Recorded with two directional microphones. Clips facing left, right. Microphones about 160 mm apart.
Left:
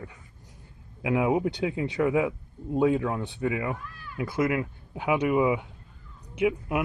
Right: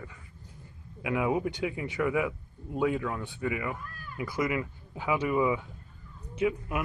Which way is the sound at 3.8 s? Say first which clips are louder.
Left 1 dB; 50° right (ahead or behind).